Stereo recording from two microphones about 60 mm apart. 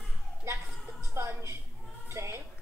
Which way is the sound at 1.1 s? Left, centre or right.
Right.